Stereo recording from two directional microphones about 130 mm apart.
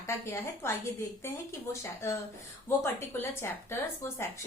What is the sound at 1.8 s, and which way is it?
A woman's voice, 20° left (ahead or behind).